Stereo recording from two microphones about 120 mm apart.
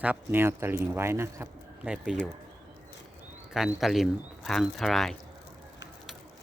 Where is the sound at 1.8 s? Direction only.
5° right (ahead or behind).